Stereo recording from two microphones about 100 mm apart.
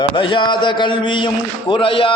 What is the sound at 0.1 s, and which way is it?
A man's voice, 55° left (ahead or behind).